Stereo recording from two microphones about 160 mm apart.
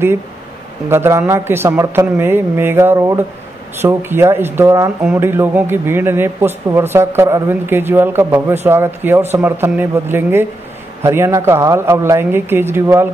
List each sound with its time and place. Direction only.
0.8 s a man's voice: 15° right (ahead or behind)